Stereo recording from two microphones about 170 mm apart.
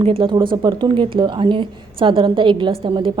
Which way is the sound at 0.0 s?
30° right (ahead or behind).